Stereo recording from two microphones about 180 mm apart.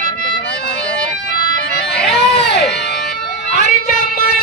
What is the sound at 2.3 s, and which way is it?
Music, 70° left (ahead or behind).